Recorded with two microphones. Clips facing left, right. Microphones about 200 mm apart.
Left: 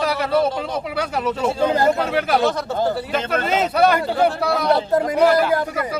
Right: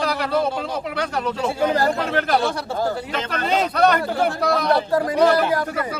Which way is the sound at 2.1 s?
5° left (ahead or behind).